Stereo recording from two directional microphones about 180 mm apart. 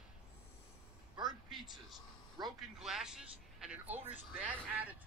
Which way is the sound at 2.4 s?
20° right (ahead or behind).